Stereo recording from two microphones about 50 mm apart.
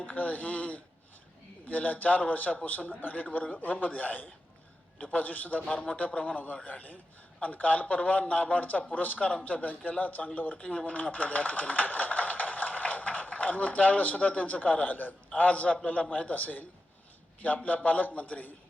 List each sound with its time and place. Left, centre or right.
0.0 s a man's voice: left
5.6 s a man's voice: left
5.9 s a man's voice: left